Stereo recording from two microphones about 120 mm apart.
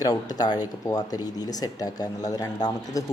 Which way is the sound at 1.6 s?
30° left (ahead or behind).